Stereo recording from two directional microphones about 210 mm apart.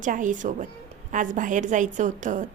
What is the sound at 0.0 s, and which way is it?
A woman's voice, 40° right (ahead or behind).